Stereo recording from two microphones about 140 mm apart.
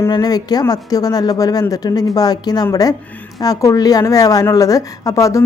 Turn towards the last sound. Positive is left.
turn(degrees=25)  # may be behind; listen again after turning